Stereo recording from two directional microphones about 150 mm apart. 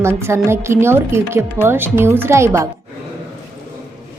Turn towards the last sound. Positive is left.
turn(degrees=-20)  # may be behind; listen again after turning